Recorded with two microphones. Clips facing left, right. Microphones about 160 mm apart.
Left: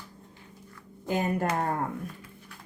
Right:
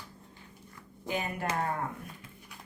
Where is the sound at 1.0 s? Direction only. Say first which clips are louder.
Left 6 dB; 45° left (ahead or behind).